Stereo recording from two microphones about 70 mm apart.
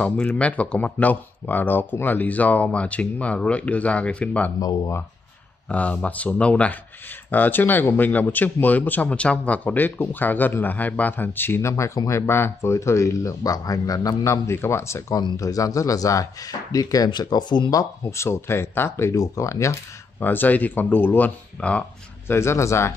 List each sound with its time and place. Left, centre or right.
0.0 s speech: centre
5.7 s speech: centre
11.7 s speech: left
14.2 s speech: left
15.3 s speech: left
18.1 s speech: left
20.2 s speech: left
22.3 s speech: left